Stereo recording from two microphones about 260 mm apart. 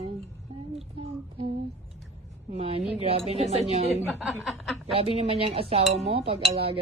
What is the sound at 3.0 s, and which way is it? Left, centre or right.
Speech, right.